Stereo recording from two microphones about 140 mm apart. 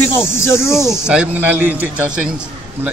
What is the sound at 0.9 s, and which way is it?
Speech, 5° right (ahead or behind).